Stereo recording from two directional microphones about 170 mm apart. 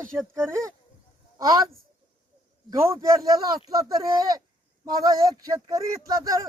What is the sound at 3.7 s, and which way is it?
Speech, 20° right (ahead or behind).